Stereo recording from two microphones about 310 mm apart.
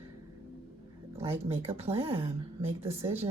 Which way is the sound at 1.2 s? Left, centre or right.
Centre.